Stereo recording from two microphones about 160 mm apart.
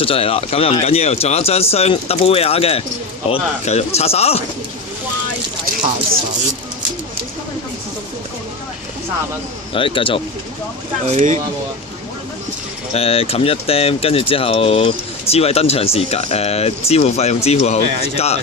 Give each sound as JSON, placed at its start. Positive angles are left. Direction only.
{"t": 0.0, "sound": "speech", "side_deg": 35}
{"t": 9.7, "sound": "speech", "side_deg": 35}
{"t": 11.0, "sound": "speech", "side_deg": -50}
{"t": 12.9, "sound": "speech", "side_deg": 40}